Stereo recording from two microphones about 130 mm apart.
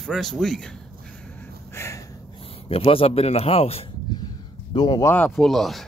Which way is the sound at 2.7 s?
45° left (ahead or behind).